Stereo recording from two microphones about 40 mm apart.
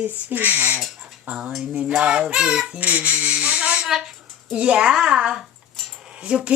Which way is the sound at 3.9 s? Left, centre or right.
Centre.